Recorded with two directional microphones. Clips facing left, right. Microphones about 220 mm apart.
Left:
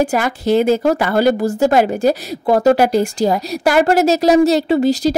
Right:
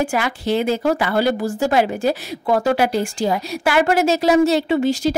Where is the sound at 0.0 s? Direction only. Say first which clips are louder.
Left 4 dB; 40° left (ahead or behind).